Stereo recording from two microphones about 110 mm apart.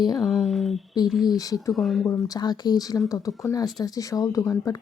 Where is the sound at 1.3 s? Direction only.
35° left (ahead or behind).